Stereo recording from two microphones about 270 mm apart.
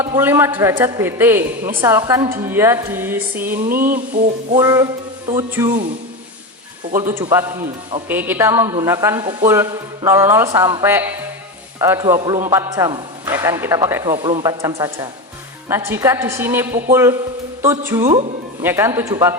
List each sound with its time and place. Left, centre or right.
0.0 s a woman's voice: centre
3.7 s a sound: right
4.5 s a woman's voice: centre
6.9 s a woman's voice: centre